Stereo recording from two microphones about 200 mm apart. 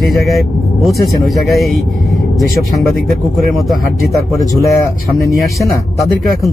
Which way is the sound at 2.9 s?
Centre (ahead or behind).